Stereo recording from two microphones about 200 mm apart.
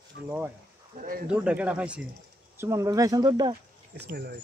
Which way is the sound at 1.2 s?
5° right (ahead or behind).